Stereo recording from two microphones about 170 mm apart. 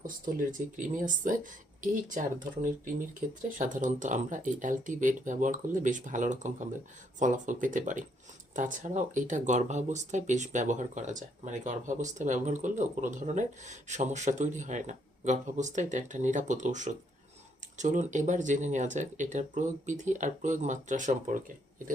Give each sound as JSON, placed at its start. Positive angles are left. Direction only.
{"t": 0.5, "sound": "speech", "side_deg": -50}